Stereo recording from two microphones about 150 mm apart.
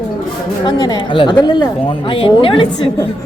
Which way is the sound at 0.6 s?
30° left (ahead or behind).